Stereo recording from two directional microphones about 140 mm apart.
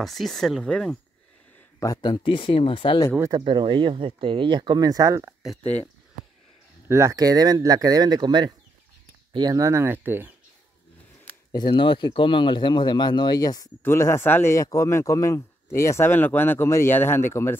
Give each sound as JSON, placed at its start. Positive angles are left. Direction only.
{"t": 0.0, "sound": "speech", "side_deg": 0}
{"t": 1.8, "sound": "speech", "side_deg": 30}
{"t": 3.2, "sound": "speech", "side_deg": -30}
{"t": 5.6, "sound": "speech", "side_deg": 10}
{"t": 6.9, "sound": "speech", "side_deg": -20}
{"t": 11.5, "sound": "speech", "side_deg": 35}